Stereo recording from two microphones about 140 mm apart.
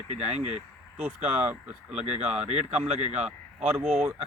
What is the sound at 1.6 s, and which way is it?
Speech, 5° right (ahead or behind).